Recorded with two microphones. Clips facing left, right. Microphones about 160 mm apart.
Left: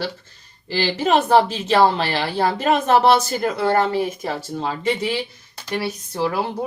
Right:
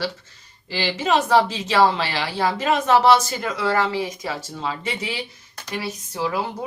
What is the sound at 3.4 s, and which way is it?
Speech, 35° left (ahead or behind).